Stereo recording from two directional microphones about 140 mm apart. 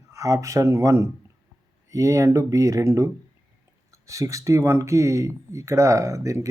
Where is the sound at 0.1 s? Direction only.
20° right (ahead or behind).